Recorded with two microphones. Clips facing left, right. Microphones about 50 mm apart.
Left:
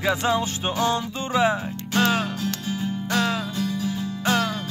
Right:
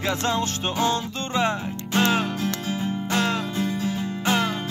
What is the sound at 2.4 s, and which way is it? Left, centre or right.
Music, right.